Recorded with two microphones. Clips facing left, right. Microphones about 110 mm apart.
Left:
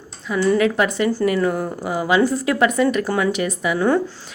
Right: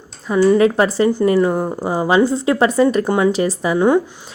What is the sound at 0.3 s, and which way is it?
A woman's voice, 35° right (ahead or behind).